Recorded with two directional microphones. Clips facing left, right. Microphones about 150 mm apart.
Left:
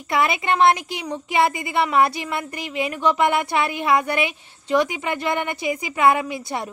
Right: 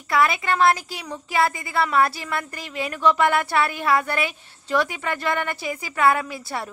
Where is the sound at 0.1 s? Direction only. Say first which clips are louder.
Even; 20° left (ahead or behind).